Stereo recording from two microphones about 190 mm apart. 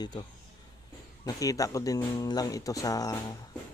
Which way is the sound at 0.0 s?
20° left (ahead or behind).